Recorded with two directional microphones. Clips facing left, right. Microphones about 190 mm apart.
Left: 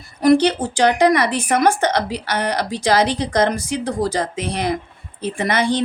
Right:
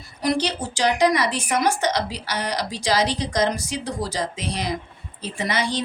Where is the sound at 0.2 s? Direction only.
55° left (ahead or behind).